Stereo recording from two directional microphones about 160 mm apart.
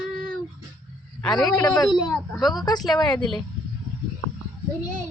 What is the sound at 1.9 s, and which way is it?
Speech, centre (ahead or behind).